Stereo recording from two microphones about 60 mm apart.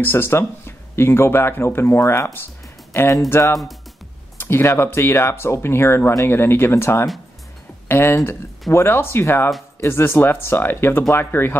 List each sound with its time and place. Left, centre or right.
0.0 s speech: left
2.9 s music: left
3.3 s speech: left